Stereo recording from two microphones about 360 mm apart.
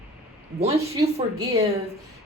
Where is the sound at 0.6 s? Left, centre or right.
Centre.